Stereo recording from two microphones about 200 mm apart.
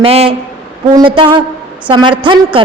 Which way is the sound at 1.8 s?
25° right (ahead or behind).